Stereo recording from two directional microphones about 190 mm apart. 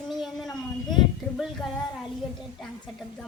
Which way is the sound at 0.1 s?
Centre (ahead or behind).